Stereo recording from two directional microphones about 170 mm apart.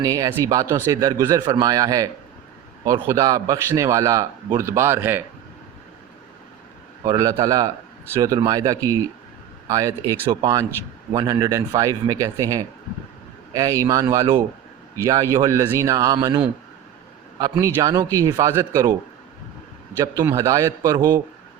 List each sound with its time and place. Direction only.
0.0 s a man's voice: 20° right (ahead or behind)
7.0 s speech: 25° right (ahead or behind)
17.7 s speech: 20° right (ahead or behind)
20.1 s a man's voice: 20° right (ahead or behind)